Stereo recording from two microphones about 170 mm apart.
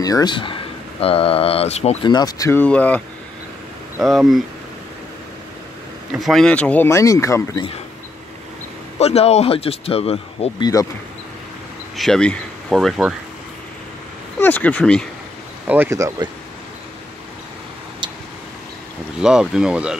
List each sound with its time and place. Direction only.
0.0 s speech: 25° left (ahead or behind); by 2.0 s 40° left (ahead or behind)
2.0 s speech: 25° left (ahead or behind)
2.6 s speech: 10° left (ahead or behind)
4.0 s speech: centre (ahead or behind)
6.1 s speech: centre (ahead or behind); by 7.6 s 20° left (ahead or behind)
8.9 s speech: 35° left (ahead or behind)
12.0 s speech: 5° left (ahead or behind)
14.4 s speech: 10° left (ahead or behind)
15.6 s speech: 10° right (ahead or behind)
19.2 s speech: 5° right (ahead or behind)